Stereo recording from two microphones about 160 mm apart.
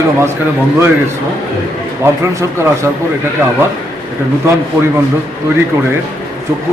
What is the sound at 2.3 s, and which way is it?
Speech, 20° right (ahead or behind).